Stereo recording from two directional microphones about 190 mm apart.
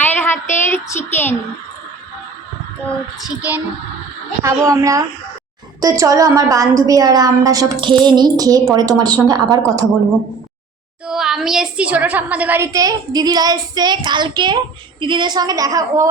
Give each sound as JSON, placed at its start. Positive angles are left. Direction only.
{"t": 0.0, "sound": "a sound", "side_deg": 10}
{"t": 0.7, "sound": "child singing", "side_deg": 10}
{"t": 3.2, "sound": "female singing", "side_deg": -5}
{"t": 4.4, "sound": "a woman's voice", "side_deg": -15}
{"t": 11.0, "sound": "a woman's voice", "side_deg": -5}